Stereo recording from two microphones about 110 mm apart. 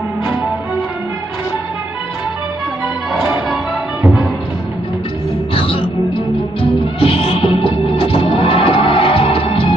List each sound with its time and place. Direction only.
5.5 s music: 55° left (ahead or behind)